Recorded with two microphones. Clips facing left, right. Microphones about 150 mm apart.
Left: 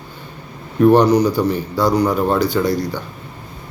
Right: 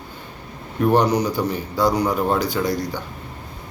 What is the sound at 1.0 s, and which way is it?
A man's voice, 20° right (ahead or behind).